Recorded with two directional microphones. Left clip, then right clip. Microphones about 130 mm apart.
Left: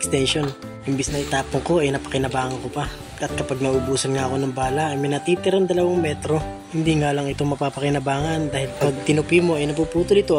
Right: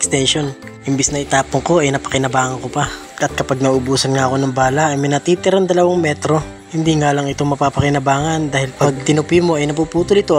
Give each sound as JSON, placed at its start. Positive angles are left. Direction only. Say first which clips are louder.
{"t": 0.1, "sound": "speech", "louder": "right 4 dB", "side_deg": -10}
{"t": 0.9, "sound": "a man's voice", "louder": "right 8 dB", "side_deg": -25}
{"t": 3.2, "sound": "speech", "louder": "right 7 dB", "side_deg": -35}
{"t": 7.0, "sound": "a man's voice", "louder": "right 6 dB", "side_deg": -25}